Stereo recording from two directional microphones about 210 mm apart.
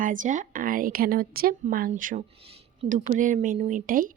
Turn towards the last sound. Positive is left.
turn(degrees=-40)  # may be behind; listen again after turning